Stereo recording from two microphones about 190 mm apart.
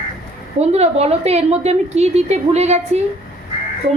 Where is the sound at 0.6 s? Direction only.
35° right (ahead or behind).